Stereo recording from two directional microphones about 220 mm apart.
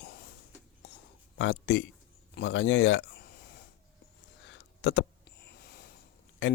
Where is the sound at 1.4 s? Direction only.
55° left (ahead or behind).